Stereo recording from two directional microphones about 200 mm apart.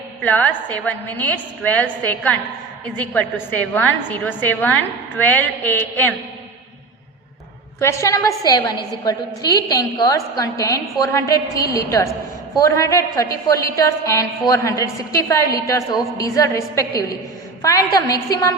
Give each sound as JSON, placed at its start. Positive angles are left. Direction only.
{"t": 0.2, "sound": "a woman's voice", "side_deg": 5}
{"t": 3.8, "sound": "a woman's voice", "side_deg": 10}
{"t": 7.8, "sound": "a woman's voice", "side_deg": 15}